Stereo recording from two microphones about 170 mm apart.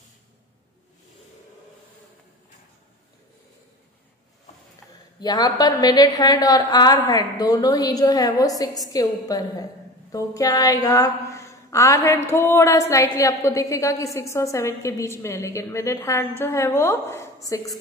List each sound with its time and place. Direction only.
5.2 s a woman's voice: 25° left (ahead or behind)